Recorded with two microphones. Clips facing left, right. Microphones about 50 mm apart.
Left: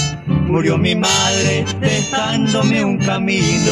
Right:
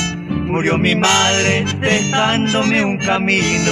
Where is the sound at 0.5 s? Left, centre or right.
Right.